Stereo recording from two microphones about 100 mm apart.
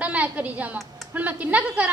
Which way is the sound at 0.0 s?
15° right (ahead or behind).